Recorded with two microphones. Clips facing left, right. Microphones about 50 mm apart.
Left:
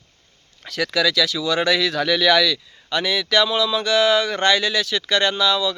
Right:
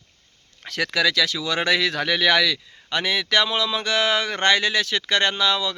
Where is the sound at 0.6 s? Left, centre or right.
Right.